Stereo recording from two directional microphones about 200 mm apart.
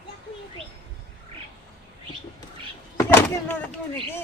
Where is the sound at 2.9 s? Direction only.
10° left (ahead or behind).